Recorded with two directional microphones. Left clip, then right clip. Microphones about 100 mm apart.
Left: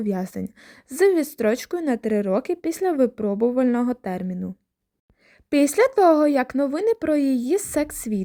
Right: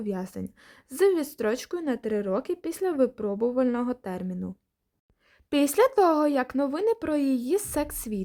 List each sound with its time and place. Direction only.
0.0 s a woman's voice: 50° left (ahead or behind)